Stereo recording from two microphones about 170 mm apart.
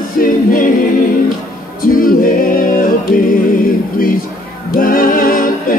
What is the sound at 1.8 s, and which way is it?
Music, 55° left (ahead or behind).